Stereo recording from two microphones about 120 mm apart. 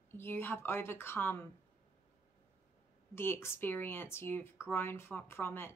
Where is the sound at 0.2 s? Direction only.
20° left (ahead or behind).